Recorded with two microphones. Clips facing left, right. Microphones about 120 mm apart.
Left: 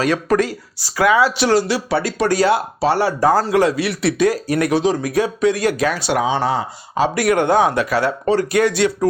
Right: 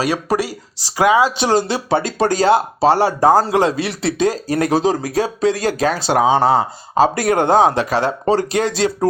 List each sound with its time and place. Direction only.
0.0 s a man's voice: 10° right (ahead or behind); by 9.0 s 30° right (ahead or behind)